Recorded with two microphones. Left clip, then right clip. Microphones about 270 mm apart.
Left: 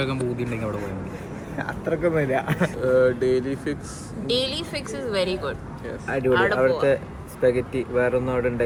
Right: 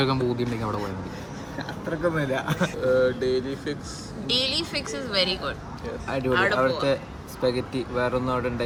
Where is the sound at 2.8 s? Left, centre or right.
Left.